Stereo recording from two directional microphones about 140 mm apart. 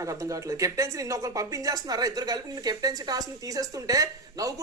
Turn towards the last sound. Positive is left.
turn(degrees=-25)  # may be behind; listen again after turning